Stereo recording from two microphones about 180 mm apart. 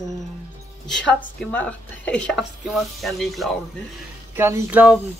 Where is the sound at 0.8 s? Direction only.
Centre (ahead or behind).